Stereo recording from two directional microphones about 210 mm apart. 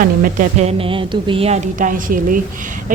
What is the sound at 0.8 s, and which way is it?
A woman's voice, 25° right (ahead or behind).